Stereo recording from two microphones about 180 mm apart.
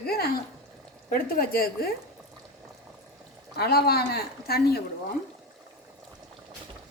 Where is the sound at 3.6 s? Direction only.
60° left (ahead or behind).